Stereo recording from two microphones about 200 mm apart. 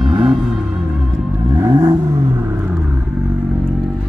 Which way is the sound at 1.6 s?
20° right (ahead or behind).